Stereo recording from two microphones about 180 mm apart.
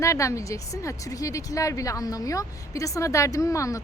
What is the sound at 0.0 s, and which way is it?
A woman's voice, 15° left (ahead or behind).